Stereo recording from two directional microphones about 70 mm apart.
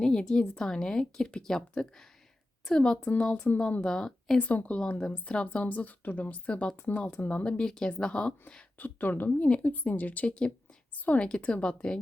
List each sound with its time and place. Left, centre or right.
0.0 s speech: centre